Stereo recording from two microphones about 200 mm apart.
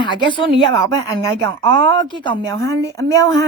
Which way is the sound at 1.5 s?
75° right (ahead or behind).